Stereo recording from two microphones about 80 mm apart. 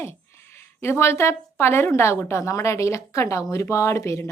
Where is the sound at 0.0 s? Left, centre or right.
Left.